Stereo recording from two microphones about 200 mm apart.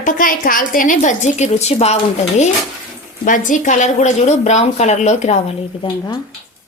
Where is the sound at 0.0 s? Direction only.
45° left (ahead or behind).